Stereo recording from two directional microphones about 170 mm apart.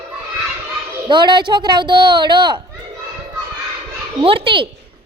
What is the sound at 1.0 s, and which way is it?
A child's voice, 25° right (ahead or behind).